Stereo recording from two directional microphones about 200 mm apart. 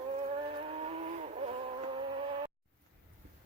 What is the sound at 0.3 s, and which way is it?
Vehicle, 30° right (ahead or behind).